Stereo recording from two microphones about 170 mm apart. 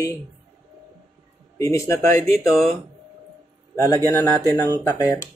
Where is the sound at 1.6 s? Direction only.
15° left (ahead or behind).